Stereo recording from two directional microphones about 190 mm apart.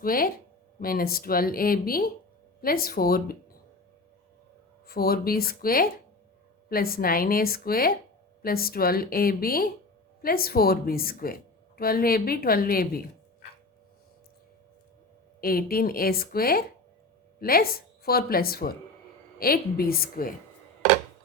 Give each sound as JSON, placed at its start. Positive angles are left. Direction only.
{"t": 0.0, "sound": "speech", "side_deg": 50}
{"t": 4.9, "sound": "speech", "side_deg": 55}
{"t": 15.4, "sound": "speech", "side_deg": 50}